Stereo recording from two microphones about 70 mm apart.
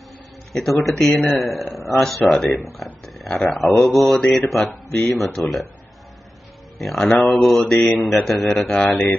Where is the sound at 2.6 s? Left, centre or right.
Centre.